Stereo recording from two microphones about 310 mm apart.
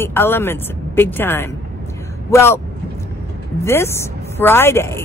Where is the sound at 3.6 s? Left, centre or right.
Centre.